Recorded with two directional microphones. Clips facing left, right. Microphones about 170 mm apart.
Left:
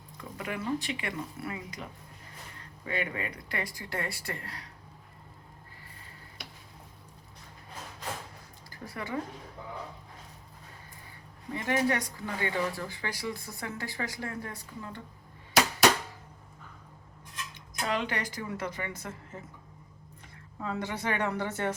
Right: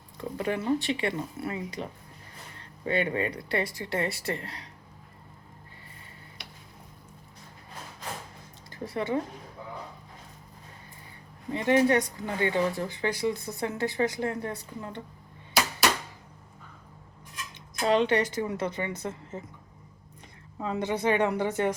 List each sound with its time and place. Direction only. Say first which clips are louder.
0.2 s speech: right 7 dB; 30° right (ahead or behind)
8.7 s speech: right 8 dB; 25° right (ahead or behind)
11.5 s speech: right 6 dB; 25° right (ahead or behind)
17.8 s speech: right 9 dB; 25° right (ahead or behind)
20.6 s speech: right 5 dB; 20° right (ahead or behind)